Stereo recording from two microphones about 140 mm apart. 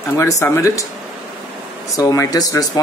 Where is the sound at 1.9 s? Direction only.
25° left (ahead or behind).